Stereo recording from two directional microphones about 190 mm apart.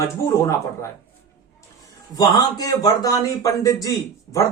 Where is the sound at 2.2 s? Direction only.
20° left (ahead or behind).